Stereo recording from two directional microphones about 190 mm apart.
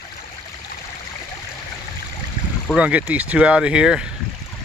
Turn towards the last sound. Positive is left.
turn(degrees=-5)  # may be behind; listen again after turning